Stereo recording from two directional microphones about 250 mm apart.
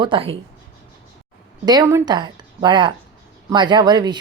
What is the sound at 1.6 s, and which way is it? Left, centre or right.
A woman's voice, centre.